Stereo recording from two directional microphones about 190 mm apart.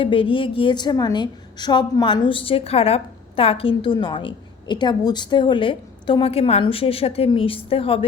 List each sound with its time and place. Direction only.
0.0 s a woman's voice: 30° left (ahead or behind)